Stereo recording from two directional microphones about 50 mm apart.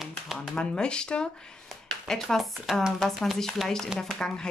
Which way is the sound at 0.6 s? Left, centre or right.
Centre.